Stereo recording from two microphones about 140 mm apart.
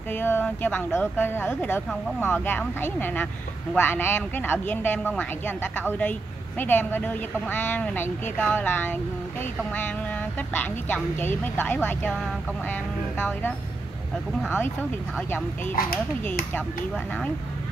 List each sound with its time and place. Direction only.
0.1 s speech: 15° left (ahead or behind)
15.1 s speech: 15° left (ahead or behind)
15.7 s speech: 90° left